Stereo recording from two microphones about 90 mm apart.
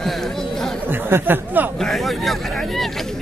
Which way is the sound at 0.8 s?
25° right (ahead or behind).